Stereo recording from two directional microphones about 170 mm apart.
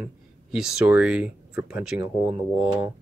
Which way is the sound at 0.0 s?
5° right (ahead or behind).